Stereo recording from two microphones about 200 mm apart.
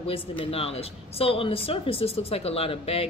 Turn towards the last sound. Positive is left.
turn(degrees=30)  # may be behind; listen again after turning